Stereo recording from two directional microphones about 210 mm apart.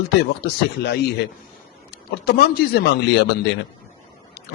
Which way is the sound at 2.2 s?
50° left (ahead or behind).